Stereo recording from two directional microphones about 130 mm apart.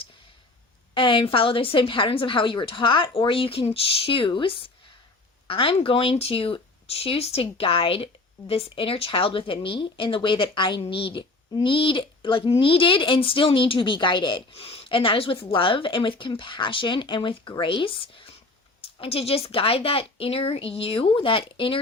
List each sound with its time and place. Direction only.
0.9 s speech: 40° left (ahead or behind)